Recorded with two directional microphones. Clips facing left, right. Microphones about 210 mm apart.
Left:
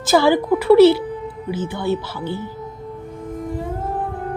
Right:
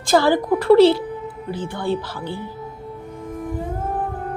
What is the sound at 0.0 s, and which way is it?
A woman's voice, 10° left (ahead or behind).